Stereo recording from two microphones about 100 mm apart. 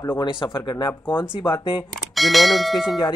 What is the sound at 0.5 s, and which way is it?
Speech, 50° left (ahead or behind).